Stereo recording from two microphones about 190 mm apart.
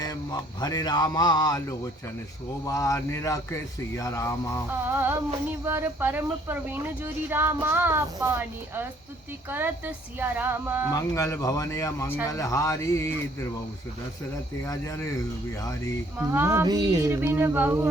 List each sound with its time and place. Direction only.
0.0 s a man's voice: 20° left (ahead or behind)
4.9 s speech: 10° right (ahead or behind)
10.9 s a man's voice: 15° left (ahead or behind)
14.6 s a man's voice: 15° left (ahead or behind)
16.1 s speech: 10° right (ahead or behind)